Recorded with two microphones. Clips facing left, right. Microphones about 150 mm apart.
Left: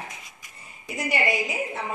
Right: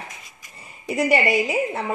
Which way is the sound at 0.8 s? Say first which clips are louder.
Right 7 dB; 70° right (ahead or behind).